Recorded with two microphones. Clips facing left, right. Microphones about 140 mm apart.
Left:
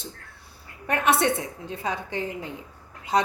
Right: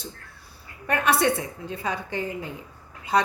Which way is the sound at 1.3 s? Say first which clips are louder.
Right 1 dB; centre (ahead or behind).